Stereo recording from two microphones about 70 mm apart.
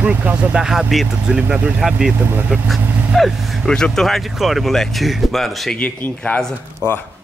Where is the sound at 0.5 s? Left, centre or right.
Centre.